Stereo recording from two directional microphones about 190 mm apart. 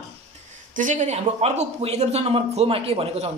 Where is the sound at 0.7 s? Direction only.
40° right (ahead or behind).